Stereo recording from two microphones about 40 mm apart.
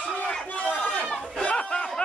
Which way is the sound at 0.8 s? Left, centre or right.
Left.